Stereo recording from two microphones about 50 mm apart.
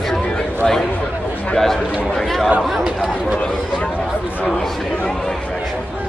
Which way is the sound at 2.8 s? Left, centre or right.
Centre.